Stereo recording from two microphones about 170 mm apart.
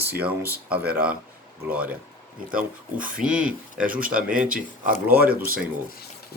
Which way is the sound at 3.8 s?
55° right (ahead or behind).